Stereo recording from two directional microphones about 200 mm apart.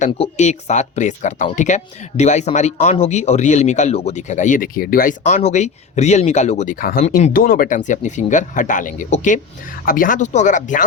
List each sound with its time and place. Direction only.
0.0 s speech: 35° left (ahead or behind)